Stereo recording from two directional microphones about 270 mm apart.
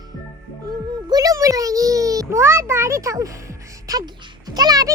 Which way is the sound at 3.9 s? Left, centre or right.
Centre.